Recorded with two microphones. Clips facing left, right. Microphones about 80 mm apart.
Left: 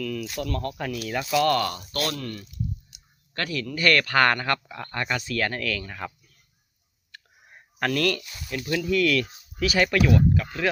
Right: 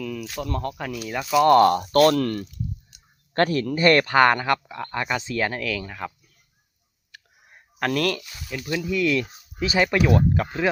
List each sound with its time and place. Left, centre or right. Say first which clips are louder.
0.0 s a sound: left 1 dB; centre
0.6 s speech: even; centre
1.5 s speech: right 11 dB; right
3.3 s speech: right 8 dB; right; by 6.1 s centre
7.1 s whispering: even; centre
7.5 s speech: right 2 dB; centre
8.8 s speech: even; centre
10.0 s speech: right 1 dB; right